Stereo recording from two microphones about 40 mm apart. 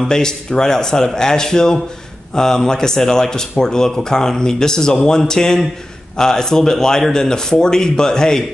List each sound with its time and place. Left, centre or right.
0.1 s speech: centre